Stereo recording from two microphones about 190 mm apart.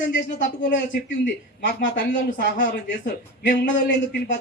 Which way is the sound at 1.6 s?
75° left (ahead or behind).